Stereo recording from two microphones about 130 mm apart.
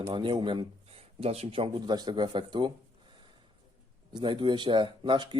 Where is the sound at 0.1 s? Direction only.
35° right (ahead or behind).